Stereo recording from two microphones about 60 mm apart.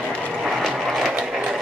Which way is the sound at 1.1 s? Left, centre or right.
Centre.